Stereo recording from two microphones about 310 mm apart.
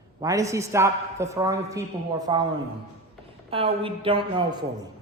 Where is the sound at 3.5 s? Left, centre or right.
Centre.